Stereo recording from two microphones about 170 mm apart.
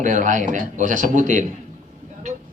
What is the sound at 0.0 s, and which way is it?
Speech, 50° right (ahead or behind).